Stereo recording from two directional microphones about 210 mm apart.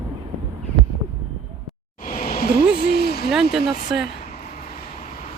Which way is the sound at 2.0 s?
40° left (ahead or behind).